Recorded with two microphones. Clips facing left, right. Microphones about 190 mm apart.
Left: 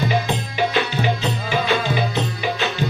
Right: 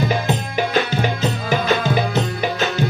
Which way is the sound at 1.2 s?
45° right (ahead or behind).